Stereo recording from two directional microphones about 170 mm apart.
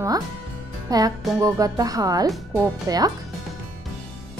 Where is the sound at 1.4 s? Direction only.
20° right (ahead or behind).